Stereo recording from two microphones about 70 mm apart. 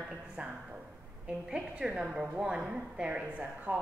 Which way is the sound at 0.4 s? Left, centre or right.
Centre.